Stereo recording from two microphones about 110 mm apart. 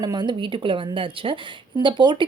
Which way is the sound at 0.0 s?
40° right (ahead or behind).